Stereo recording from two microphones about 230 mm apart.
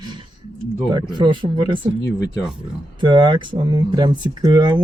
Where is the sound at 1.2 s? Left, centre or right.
Right.